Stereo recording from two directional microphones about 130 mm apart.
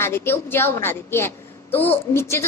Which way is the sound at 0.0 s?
20° left (ahead or behind).